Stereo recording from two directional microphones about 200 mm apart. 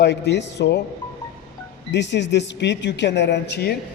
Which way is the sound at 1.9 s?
60° left (ahead or behind).